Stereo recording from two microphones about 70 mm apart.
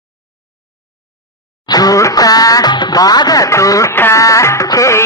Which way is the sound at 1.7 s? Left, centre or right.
Left.